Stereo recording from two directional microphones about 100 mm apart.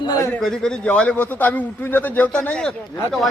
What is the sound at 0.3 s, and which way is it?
A man's voice, 5° left (ahead or behind).